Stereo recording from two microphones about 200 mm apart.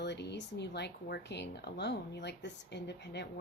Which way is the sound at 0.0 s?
60° left (ahead or behind).